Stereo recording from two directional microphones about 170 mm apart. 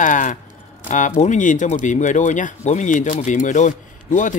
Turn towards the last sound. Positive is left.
turn(degrees=45)  # may be behind; listen again after turning